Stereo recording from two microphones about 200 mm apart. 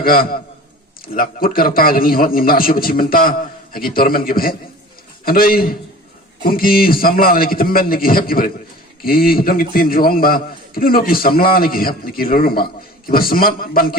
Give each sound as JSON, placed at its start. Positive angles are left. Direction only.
{"t": 0.0, "sound": "a man's voice", "side_deg": 45}